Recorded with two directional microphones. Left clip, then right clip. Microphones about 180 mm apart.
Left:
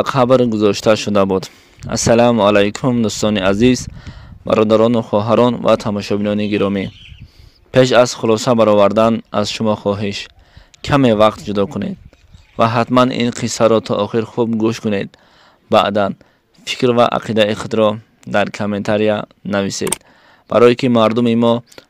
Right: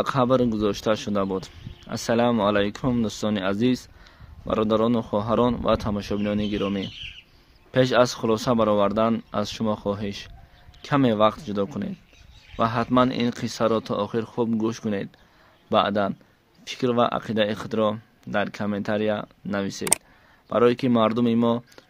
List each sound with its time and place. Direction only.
0.0 s speech: 50° left (ahead or behind)